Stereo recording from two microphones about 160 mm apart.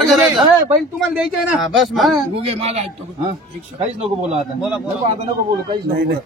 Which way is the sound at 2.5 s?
40° right (ahead or behind).